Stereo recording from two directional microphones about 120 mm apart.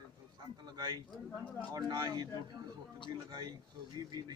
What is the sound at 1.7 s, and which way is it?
Speech, 30° right (ahead or behind).